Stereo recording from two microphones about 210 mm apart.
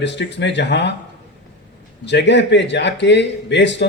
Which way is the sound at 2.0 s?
55° left (ahead or behind).